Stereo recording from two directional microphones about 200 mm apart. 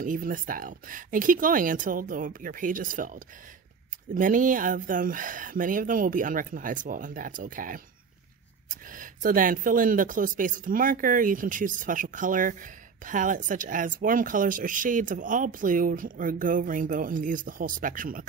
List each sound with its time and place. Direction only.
0.0 s speech: 40° right (ahead or behind)